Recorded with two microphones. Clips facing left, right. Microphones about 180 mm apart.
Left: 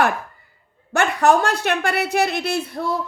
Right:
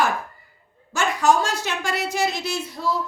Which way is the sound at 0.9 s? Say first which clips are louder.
Left 3 dB; 60° left (ahead or behind).